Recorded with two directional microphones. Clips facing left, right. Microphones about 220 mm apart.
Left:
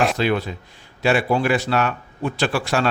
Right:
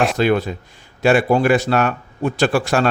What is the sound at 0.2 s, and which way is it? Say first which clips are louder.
A man's voice: right 4 dB; 45° right (ahead or behind).